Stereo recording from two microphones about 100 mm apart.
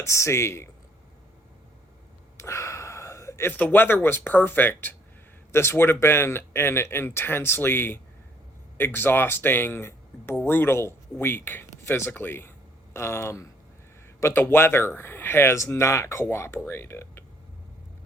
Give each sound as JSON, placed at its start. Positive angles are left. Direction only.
{"t": 0.0, "sound": "speech", "side_deg": 30}
{"t": 2.4, "sound": "speech", "side_deg": 30}